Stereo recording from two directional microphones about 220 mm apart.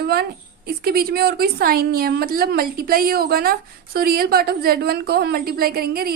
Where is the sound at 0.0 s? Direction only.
45° right (ahead or behind).